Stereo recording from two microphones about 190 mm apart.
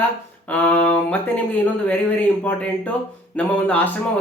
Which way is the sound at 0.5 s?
5° left (ahead or behind).